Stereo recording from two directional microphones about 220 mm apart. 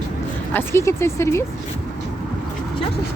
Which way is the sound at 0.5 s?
10° left (ahead or behind).